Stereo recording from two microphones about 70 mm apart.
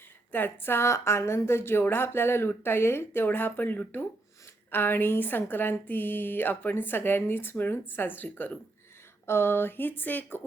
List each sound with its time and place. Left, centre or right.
0.3 s speech: left